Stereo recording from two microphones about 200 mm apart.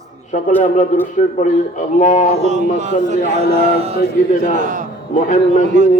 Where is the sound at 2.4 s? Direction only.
35° right (ahead or behind).